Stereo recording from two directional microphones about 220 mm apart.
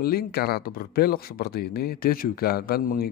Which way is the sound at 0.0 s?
45° left (ahead or behind).